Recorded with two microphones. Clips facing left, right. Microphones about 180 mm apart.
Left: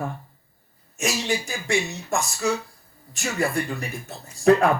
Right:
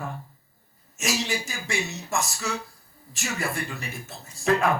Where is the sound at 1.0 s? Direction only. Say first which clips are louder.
Left 3 dB; 35° left (ahead or behind).